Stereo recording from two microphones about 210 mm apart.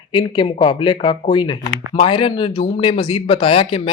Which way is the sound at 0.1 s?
20° left (ahead or behind).